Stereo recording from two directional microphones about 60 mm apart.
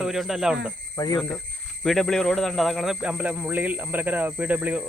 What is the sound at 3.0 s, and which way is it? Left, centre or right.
Speech, right.